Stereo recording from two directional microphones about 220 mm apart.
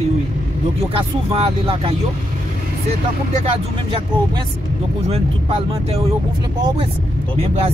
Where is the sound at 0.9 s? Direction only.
25° right (ahead or behind).